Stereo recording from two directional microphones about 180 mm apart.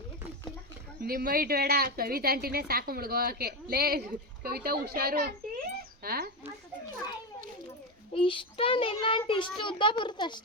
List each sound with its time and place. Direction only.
1.0 s a woman's voice: 55° right (ahead or behind)
8.1 s a child's voice: 30° left (ahead or behind)